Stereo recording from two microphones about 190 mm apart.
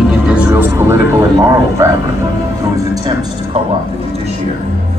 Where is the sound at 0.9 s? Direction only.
15° right (ahead or behind).